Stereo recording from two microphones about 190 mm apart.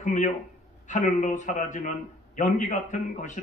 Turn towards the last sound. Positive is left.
turn(degrees=40)  # may be behind; listen again after turning